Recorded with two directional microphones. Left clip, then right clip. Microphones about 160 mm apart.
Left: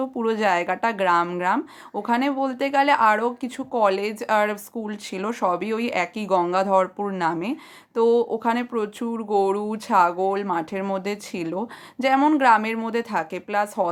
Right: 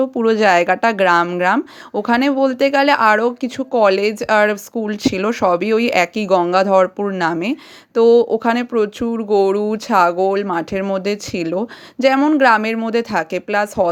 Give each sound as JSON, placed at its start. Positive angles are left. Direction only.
{"t": 0.0, "sound": "speech", "side_deg": -30}